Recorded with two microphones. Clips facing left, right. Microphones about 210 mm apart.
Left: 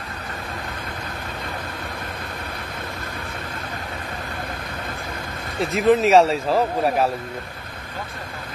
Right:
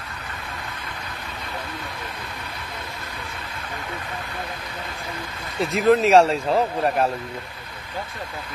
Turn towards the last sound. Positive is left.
turn(degrees=0)  # may be behind; listen again after turning